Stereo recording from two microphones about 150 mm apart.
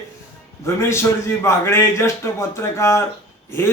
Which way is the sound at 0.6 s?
15° left (ahead or behind).